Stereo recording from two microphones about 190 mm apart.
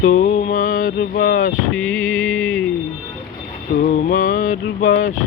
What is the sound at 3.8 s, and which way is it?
Mantra, 45° left (ahead or behind).